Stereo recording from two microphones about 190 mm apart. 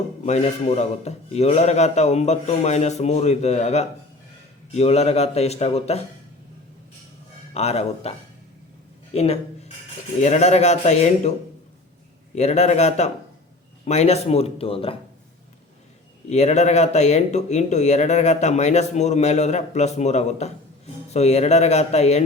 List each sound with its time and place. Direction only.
0.3 s speech: 35° left (ahead or behind)
7.5 s speech: 35° left (ahead or behind)
9.1 s speech: 35° left (ahead or behind)
16.3 s speech: 35° left (ahead or behind)